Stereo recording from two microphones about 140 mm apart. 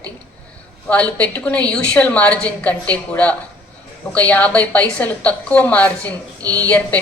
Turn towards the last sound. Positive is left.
turn(degrees=10)  # may be behind; listen again after turning